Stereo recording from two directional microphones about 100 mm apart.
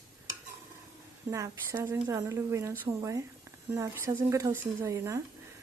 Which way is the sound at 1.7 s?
25° right (ahead or behind).